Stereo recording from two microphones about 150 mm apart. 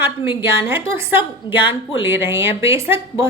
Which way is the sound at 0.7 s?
15° right (ahead or behind).